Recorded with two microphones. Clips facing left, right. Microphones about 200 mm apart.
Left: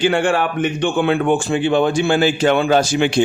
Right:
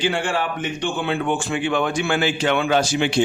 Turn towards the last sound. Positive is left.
turn(degrees=45)  # may be behind; listen again after turning